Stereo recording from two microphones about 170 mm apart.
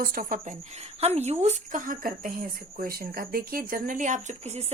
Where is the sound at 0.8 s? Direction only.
40° right (ahead or behind).